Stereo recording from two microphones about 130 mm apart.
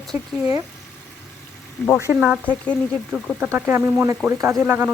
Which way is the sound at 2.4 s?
10° left (ahead or behind).